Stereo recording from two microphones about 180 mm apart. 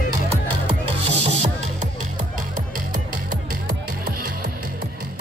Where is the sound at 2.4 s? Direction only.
50° right (ahead or behind).